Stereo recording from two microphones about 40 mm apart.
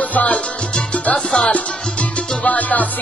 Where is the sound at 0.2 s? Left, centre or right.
Left.